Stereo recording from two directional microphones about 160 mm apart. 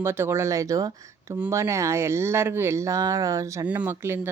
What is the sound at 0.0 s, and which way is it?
Speech, 15° right (ahead or behind).